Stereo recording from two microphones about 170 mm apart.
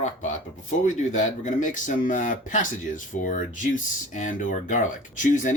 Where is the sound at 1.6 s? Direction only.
50° left (ahead or behind).